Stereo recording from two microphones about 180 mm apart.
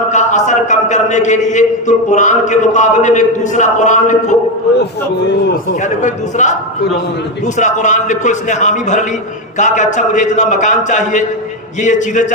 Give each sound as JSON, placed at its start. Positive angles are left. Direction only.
{"t": 0.1, "sound": "a man's voice", "side_deg": 40}
{"t": 5.8, "sound": "a man's voice", "side_deg": 40}